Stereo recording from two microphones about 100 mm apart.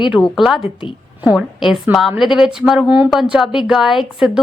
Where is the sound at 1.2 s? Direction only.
5° right (ahead or behind).